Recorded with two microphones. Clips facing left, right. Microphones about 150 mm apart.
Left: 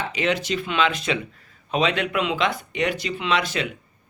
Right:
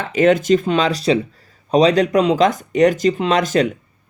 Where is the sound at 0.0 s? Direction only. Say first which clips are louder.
Right 10 dB; 50° right (ahead or behind).